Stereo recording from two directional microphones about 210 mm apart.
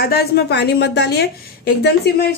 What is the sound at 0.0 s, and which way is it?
A woman's voice, 50° left (ahead or behind).